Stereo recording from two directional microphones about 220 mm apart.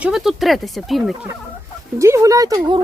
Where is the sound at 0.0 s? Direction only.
Centre (ahead or behind).